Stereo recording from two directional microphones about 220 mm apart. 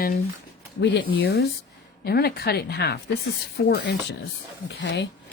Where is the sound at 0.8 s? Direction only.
55° left (ahead or behind).